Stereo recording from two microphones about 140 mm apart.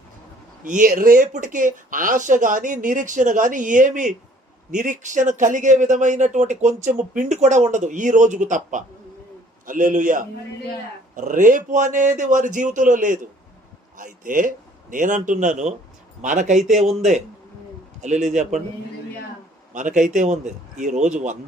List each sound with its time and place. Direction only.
0.6 s speech: 70° right (ahead or behind)
19.7 s speech: 65° right (ahead or behind)